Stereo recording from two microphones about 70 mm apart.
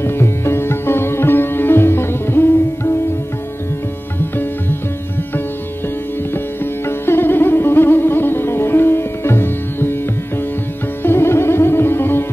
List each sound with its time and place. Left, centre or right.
0.0 s sitar: left
6.3 s music: left